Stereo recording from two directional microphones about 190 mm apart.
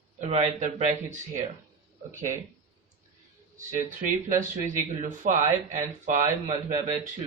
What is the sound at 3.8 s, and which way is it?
Speech, 45° right (ahead or behind).